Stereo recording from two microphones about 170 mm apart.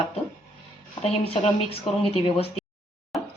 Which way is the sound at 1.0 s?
35° left (ahead or behind).